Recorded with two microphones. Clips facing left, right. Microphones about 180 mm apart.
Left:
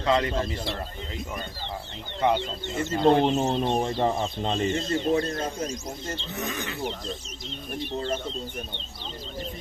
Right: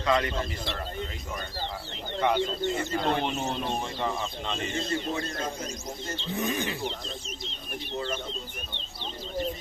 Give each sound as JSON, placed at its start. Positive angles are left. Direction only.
{"t": 0.0, "sound": "speech", "side_deg": 25}
{"t": 2.2, "sound": "speech", "side_deg": 20}
{"t": 6.3, "sound": "speech", "side_deg": -30}
{"t": 7.9, "sound": "speech", "side_deg": 35}